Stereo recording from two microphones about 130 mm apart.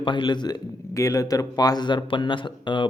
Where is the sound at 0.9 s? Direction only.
25° left (ahead or behind).